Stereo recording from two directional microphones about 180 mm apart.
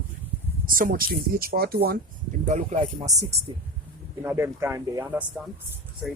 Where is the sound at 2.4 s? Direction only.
40° right (ahead or behind).